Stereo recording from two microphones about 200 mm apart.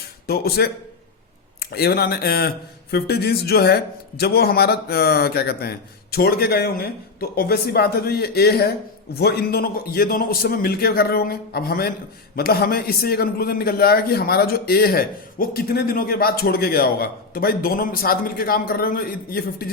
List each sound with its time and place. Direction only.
0.3 s a man's voice: 50° left (ahead or behind)